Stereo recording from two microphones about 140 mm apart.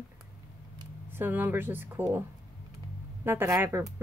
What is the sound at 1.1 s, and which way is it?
Speech, 15° right (ahead or behind).